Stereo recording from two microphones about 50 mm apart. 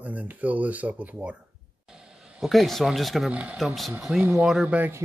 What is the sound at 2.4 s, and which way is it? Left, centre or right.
A man's voice, centre.